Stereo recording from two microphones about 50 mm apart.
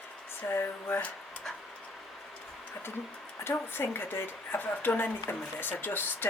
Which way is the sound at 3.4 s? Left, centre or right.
Left.